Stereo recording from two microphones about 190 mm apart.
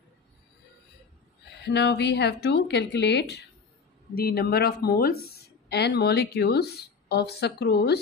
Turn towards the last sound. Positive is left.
turn(degrees=60)  # may be behind; listen again after turning